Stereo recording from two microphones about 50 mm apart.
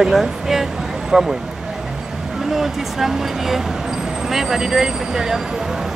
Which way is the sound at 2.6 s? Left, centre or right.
Centre.